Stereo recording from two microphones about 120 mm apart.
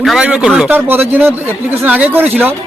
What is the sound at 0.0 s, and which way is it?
A man's voice, centre (ahead or behind).